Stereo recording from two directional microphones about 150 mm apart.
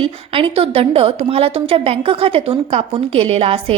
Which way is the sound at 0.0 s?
35° right (ahead or behind).